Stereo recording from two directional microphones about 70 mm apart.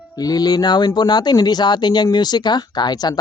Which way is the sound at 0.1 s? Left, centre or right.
Left.